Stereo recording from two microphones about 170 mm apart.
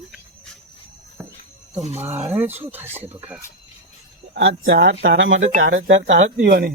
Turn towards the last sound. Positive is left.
turn(degrees=-65)  # may be behind; listen again after turning